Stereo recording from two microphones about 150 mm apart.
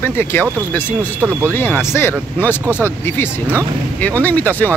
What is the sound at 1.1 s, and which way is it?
Speech, 15° right (ahead or behind).